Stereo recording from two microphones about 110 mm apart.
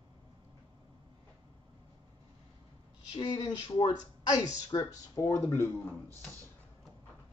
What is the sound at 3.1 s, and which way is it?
Speech, 45° left (ahead or behind).